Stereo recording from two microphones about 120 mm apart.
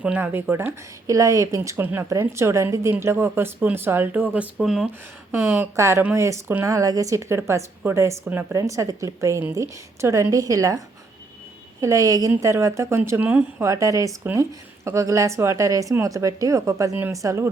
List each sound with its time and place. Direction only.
0.0 s speech: 15° right (ahead or behind)
1.0 s a woman's voice: 25° right (ahead or behind); by 4.9 s 5° right (ahead or behind)
5.3 s a woman's voice: 20° right (ahead or behind)
8.5 s a woman's voice: 25° right (ahead or behind)
11.8 s a woman's voice: 30° right (ahead or behind)
13.7 s a woman's voice: 25° right (ahead or behind)